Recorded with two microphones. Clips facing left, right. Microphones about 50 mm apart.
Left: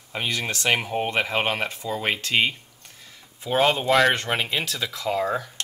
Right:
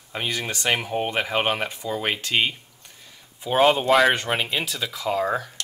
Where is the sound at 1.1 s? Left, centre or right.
Centre.